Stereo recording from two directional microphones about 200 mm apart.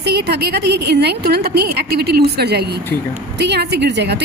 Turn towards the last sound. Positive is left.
turn(degrees=-55)  # may be behind; listen again after turning